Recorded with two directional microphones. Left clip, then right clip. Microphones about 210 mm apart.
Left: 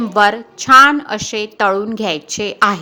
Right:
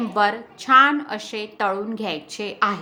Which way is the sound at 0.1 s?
35° left (ahead or behind).